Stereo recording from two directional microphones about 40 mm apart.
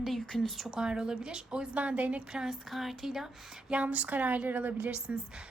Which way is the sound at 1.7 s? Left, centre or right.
Right.